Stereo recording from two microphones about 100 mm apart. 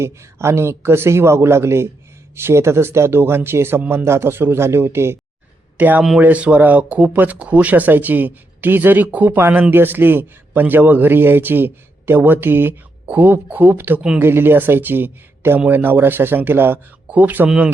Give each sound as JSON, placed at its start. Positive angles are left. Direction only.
{"t": 0.0, "sound": "speech", "side_deg": -25}